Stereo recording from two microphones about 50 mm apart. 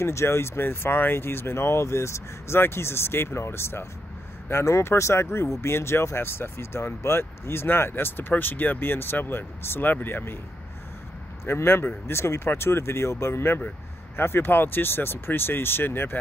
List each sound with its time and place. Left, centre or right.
0.0 s speech: left
2.6 s speech: left
11.4 s speech: left